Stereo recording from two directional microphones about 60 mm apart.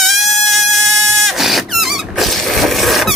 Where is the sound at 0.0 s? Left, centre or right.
Centre.